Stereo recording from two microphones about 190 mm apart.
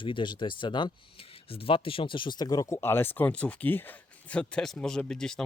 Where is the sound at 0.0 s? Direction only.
25° left (ahead or behind).